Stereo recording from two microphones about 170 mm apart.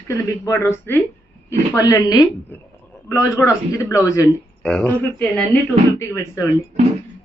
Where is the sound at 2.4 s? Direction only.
10° left (ahead or behind).